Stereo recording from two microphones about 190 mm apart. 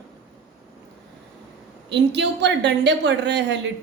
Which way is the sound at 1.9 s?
65° right (ahead or behind).